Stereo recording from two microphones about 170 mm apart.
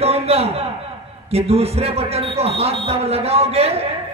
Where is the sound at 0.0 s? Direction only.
35° right (ahead or behind).